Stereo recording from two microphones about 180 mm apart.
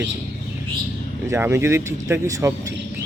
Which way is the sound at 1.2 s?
15° right (ahead or behind).